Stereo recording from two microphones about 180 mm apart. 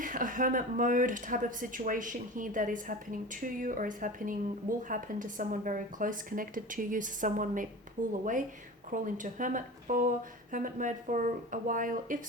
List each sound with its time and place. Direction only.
0.0 s speech: 50° right (ahead or behind)